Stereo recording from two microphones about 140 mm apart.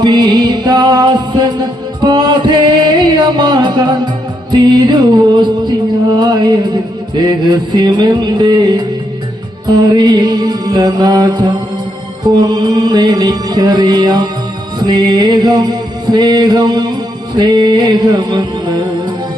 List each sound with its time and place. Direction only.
0.0 s music: 30° right (ahead or behind)